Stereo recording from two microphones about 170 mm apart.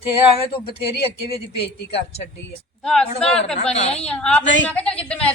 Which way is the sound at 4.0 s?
5° left (ahead or behind).